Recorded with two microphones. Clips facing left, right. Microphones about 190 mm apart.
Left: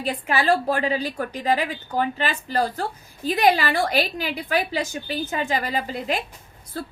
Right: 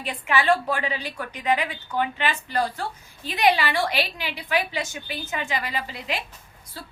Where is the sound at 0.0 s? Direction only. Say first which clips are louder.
Left 1 dB; 40° left (ahead or behind).